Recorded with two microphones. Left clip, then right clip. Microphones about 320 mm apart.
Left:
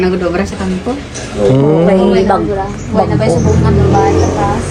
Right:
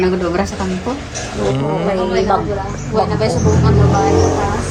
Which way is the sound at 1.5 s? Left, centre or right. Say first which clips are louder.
Left 9 dB; centre.